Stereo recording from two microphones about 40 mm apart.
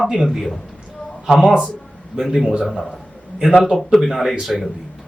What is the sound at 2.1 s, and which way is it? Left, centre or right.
Speech, right.